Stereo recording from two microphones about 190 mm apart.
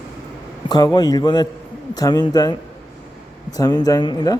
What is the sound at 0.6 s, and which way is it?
Speech, 20° left (ahead or behind).